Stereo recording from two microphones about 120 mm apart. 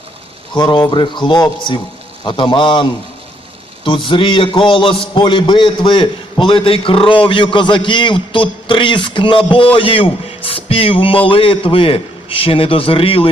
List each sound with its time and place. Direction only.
0.5 s a man's voice: 40° left (ahead or behind)
3.8 s a man's voice: 45° left (ahead or behind)